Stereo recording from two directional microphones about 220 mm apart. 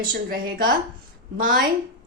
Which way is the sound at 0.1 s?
40° right (ahead or behind).